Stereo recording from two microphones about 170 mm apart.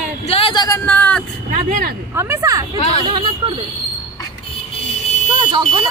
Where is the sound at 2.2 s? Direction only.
15° right (ahead or behind).